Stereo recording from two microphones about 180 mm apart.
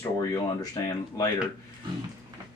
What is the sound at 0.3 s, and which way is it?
Speech, 20° left (ahead or behind).